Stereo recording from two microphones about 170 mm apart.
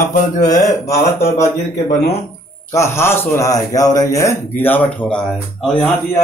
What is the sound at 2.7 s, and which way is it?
A man's voice, 15° left (ahead or behind).